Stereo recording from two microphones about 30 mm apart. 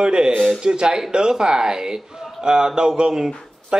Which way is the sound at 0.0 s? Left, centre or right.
Right.